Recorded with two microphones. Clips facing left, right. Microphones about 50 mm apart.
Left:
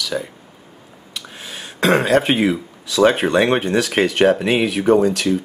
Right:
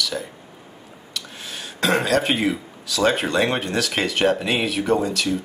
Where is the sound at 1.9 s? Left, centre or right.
Left.